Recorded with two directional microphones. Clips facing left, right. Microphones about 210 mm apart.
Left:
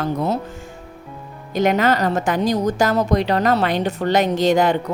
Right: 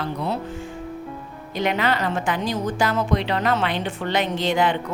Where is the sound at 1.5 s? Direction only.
45° left (ahead or behind).